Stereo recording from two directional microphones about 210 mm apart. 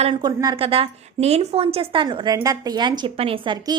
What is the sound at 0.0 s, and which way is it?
A woman's voice, 20° right (ahead or behind).